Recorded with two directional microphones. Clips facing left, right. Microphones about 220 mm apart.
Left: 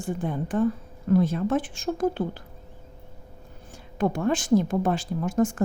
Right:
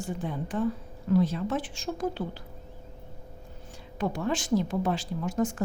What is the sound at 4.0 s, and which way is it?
Speech, 50° left (ahead or behind).